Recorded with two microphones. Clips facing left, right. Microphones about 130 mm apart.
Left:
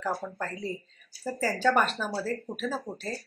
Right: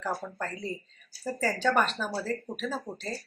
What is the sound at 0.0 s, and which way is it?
Speech, 10° left (ahead or behind).